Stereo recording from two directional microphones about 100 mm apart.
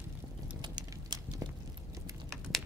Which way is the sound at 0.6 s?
45° right (ahead or behind).